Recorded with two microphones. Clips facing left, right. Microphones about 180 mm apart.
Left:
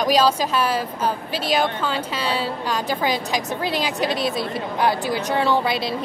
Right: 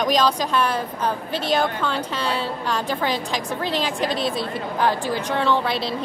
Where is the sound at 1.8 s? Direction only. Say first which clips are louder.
Even; 5° left (ahead or behind).